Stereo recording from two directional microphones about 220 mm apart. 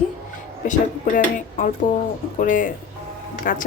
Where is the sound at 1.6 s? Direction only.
35° left (ahead or behind).